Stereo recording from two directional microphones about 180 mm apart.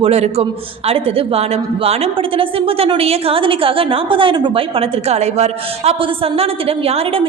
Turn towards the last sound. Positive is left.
turn(degrees=-35)  # may be behind; listen again after turning